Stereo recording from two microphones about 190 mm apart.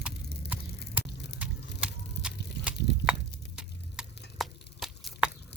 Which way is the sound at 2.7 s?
60° left (ahead or behind).